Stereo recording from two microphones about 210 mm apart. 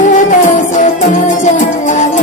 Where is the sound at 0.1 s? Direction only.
35° left (ahead or behind).